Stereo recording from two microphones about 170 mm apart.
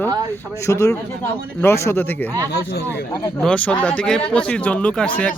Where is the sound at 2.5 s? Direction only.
75° left (ahead or behind).